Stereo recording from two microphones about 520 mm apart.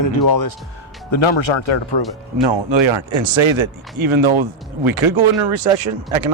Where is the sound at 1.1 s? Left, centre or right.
Left.